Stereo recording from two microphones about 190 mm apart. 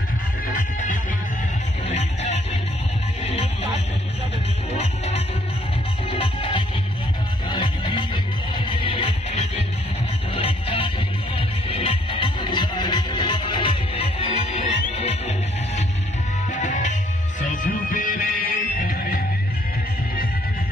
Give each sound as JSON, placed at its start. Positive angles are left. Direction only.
{"t": 0.6, "sound": "music", "side_deg": 45}
{"t": 4.7, "sound": "music", "side_deg": 35}
{"t": 16.5, "sound": "music", "side_deg": 40}